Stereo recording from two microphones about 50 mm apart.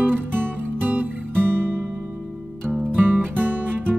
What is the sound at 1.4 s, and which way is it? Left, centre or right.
Music, right.